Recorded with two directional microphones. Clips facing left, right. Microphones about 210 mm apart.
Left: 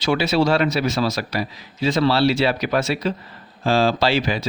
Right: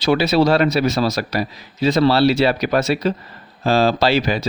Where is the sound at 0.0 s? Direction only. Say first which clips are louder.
Right 3 dB; 35° right (ahead or behind).